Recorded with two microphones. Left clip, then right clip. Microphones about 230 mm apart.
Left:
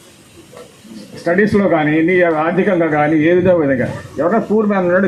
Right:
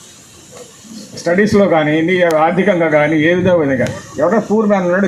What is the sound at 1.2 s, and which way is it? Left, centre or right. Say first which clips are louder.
Speech: right 2 dB; right.